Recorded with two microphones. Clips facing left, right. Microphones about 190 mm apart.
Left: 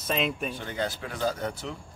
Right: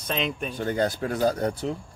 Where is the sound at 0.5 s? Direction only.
40° right (ahead or behind).